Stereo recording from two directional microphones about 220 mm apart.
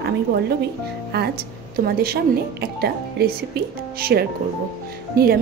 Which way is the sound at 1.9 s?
45° right (ahead or behind).